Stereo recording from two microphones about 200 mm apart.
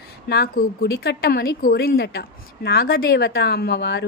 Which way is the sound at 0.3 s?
50° left (ahead or behind).